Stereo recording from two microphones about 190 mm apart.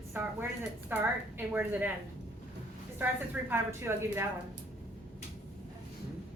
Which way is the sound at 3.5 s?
15° right (ahead or behind).